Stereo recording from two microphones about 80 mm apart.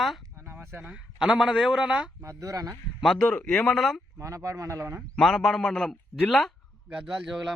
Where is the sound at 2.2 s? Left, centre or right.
Right.